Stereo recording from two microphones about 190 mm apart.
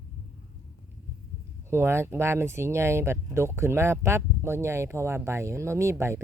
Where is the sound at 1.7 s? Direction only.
15° right (ahead or behind).